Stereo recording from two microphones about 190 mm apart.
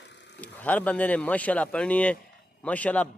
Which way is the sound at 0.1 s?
65° left (ahead or behind).